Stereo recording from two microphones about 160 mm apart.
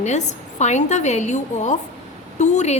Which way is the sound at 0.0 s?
45° left (ahead or behind).